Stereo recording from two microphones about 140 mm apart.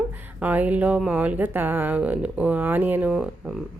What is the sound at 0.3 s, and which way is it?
A woman's voice, 10° right (ahead or behind).